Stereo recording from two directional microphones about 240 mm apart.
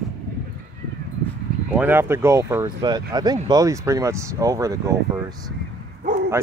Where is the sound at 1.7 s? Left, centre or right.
Centre.